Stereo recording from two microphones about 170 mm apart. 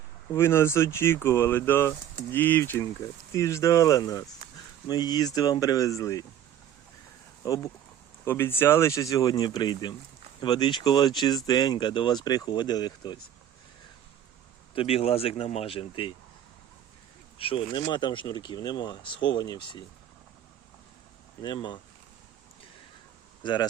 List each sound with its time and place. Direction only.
0.3 s speech: 15° left (ahead or behind)
7.4 s speech: 20° left (ahead or behind)
14.8 s speech: 35° left (ahead or behind)
17.3 s speech: 35° left (ahead or behind)
21.4 s speech: 25° left (ahead or behind)
23.4 s speech: 25° left (ahead or behind)